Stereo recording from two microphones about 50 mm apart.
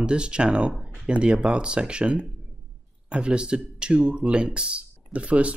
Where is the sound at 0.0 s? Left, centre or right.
Centre.